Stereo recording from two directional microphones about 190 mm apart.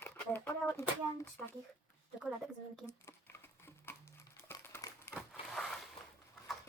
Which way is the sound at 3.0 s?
15° left (ahead or behind).